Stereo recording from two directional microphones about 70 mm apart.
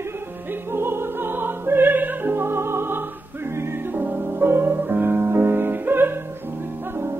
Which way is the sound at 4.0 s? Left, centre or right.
Right.